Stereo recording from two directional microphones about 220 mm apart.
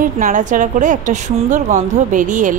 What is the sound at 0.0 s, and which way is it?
A woman's voice, 35° right (ahead or behind).